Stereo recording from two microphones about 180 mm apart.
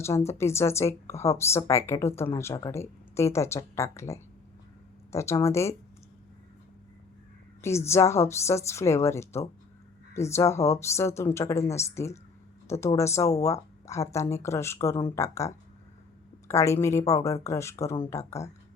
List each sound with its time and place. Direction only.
0.3 s speech: 15° left (ahead or behind)
7.6 s speech: 15° left (ahead or behind)